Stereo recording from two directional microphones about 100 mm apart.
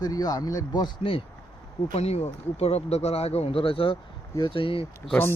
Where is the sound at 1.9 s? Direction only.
90° left.